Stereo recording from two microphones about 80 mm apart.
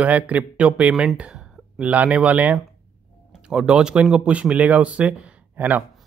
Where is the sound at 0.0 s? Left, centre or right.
Centre.